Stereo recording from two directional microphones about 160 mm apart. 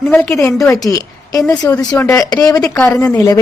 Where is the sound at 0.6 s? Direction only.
20° left (ahead or behind).